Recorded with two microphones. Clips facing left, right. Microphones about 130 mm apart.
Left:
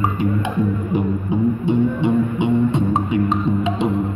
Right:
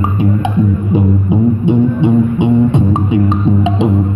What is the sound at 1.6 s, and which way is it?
Music, 60° right (ahead or behind).